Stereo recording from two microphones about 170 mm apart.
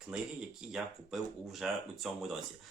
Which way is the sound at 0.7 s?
Centre (ahead or behind).